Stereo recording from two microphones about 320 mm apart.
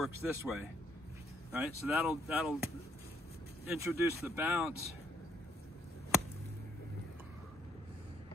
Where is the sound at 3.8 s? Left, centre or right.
Centre.